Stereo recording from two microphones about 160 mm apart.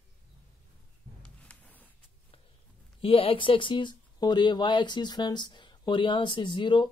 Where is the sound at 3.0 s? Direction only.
35° left (ahead or behind).